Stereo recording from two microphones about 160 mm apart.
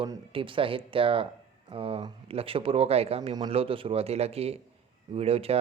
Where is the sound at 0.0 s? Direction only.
30° right (ahead or behind).